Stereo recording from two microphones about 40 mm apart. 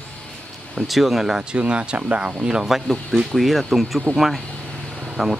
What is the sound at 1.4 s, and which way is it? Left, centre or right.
Speech, right.